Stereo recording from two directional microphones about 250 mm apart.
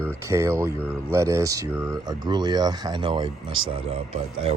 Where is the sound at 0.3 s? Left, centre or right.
Centre.